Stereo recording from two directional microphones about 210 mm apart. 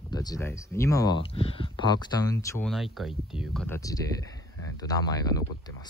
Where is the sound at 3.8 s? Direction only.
15° left (ahead or behind).